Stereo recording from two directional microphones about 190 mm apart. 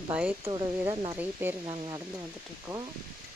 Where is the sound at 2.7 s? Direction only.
5° right (ahead or behind).